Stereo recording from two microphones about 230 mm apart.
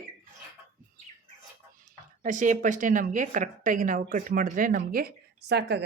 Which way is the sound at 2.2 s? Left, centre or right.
Right.